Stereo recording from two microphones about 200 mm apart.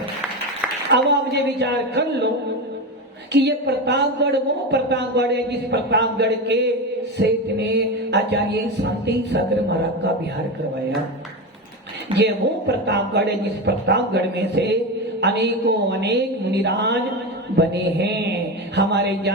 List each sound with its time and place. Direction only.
0.9 s a woman's voice: 60° right (ahead or behind)
3.3 s a woman's voice: 60° right (ahead or behind)
12.1 s a woman's voice: 60° right (ahead or behind)